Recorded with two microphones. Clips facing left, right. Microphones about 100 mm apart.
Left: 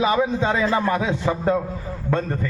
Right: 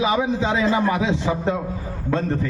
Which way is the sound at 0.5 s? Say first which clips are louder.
Right 1 dB; 20° right (ahead or behind).